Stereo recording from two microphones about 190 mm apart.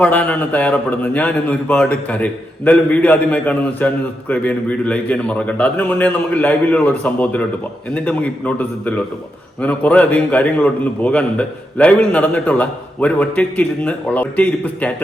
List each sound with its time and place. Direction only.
0.0 s a man's voice: 10° left (ahead or behind)